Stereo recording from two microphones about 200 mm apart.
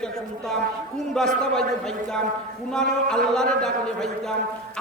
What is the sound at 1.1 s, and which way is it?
A man's voice, 5° left (ahead or behind).